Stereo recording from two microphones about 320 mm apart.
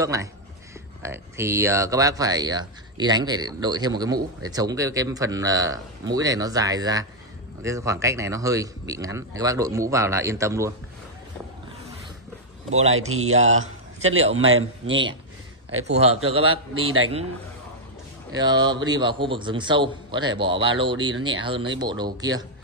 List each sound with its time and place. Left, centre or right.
0.0 s speech: centre
13.3 s speech: right
14.0 s a man's voice: right
15.8 s speech: centre
18.3 s speech: centre